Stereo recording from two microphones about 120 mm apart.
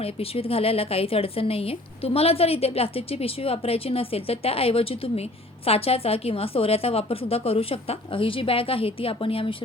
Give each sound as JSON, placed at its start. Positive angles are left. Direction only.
{"t": 0.0, "sound": "a woman's voice", "side_deg": 55}